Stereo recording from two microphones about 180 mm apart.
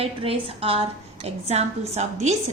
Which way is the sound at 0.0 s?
30° right (ahead or behind).